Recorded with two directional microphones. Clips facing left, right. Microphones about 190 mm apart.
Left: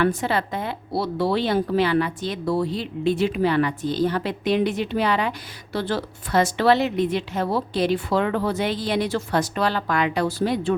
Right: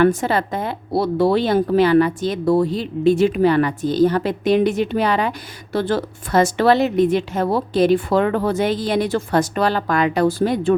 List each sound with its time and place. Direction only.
0.0 s a woman's voice: 45° right (ahead or behind)